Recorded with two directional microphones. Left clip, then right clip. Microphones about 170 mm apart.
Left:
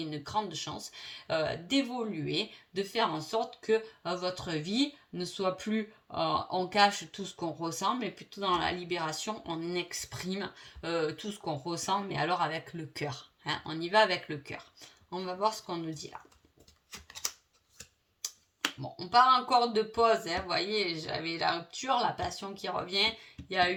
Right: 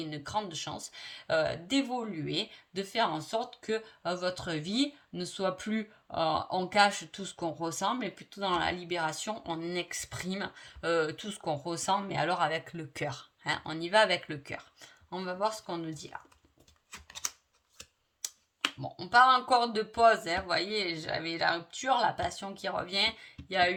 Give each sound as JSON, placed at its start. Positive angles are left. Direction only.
{"t": 0.0, "sound": "speech", "side_deg": -45}
{"t": 16.9, "sound": "a sound", "side_deg": -25}
{"t": 18.8, "sound": "speech", "side_deg": -50}